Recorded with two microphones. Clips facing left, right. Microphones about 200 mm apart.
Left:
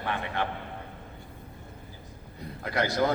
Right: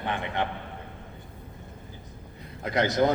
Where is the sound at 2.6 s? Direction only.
20° right (ahead or behind).